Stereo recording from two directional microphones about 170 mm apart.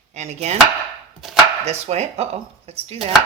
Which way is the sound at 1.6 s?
40° right (ahead or behind).